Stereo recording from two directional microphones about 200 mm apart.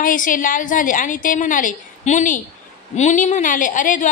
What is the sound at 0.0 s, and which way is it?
A woman's voice, 40° left (ahead or behind).